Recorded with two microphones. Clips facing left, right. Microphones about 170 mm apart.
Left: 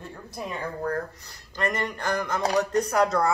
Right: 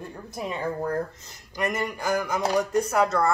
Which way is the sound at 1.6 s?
5° right (ahead or behind).